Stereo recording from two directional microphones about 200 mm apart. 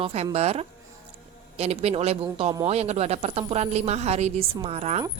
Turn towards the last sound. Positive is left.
turn(degrees=-30)  # may be behind; listen again after turning